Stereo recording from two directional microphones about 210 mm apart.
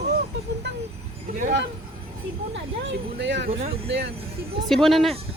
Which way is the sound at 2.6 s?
55° right (ahead or behind).